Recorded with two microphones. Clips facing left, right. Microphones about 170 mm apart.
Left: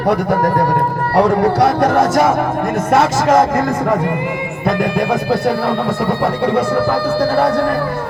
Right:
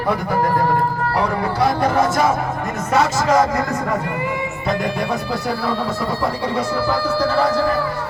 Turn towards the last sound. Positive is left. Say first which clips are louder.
# left 3 dB
turn(degrees=60)  # may be behind; listen again after turning